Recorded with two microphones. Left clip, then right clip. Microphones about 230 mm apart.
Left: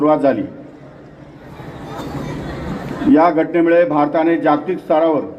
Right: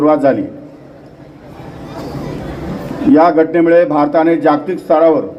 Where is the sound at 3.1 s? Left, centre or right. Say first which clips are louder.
Right 4 dB; right.